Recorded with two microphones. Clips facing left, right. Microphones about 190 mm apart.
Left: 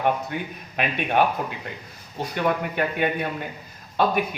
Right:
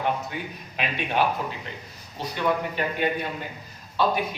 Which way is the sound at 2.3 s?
55° left (ahead or behind).